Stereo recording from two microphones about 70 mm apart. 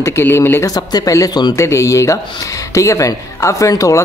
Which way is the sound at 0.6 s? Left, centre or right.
Left.